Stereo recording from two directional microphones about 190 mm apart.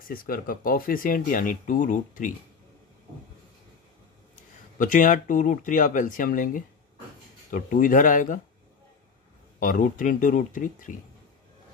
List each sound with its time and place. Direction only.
0.0 s speech: 50° left (ahead or behind)
4.7 s speech: 45° left (ahead or behind)
9.6 s speech: 45° left (ahead or behind)